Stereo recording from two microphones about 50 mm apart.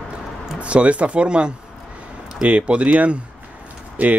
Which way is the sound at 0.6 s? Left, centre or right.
Right.